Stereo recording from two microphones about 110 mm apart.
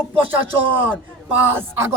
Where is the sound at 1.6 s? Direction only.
20° right (ahead or behind).